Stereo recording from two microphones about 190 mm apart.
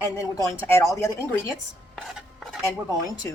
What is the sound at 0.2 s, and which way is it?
Speech, 15° left (ahead or behind).